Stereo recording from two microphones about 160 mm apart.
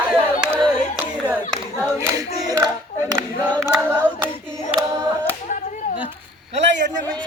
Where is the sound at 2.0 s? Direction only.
20° right (ahead or behind).